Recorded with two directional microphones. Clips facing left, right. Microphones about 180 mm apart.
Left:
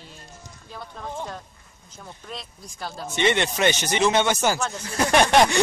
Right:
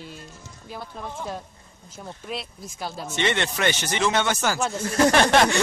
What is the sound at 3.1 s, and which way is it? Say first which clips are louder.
Speech: left 3 dB; 15° left (ahead or behind).